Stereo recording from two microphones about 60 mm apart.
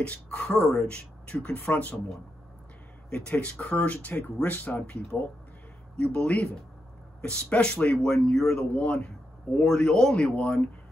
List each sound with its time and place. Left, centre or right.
0.4 s speech: left
3.1 s speech: left
5.1 s a woman's voice: centre